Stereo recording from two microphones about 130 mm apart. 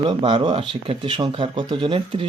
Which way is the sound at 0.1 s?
40° right (ahead or behind).